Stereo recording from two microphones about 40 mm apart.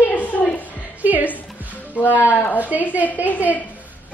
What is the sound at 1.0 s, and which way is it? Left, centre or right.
Speech, right.